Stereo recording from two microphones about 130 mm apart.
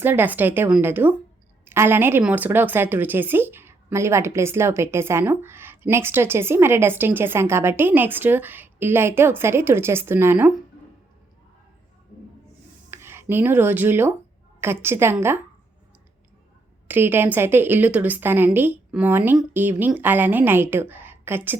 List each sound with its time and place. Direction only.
0.0 s a woman's voice: 15° right (ahead or behind)
12.9 s a woman's voice: 20° right (ahead or behind)
16.9 s a woman's voice: 15° right (ahead or behind)